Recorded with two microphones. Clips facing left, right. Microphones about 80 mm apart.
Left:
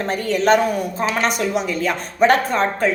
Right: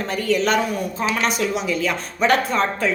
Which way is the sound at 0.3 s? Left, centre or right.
Left.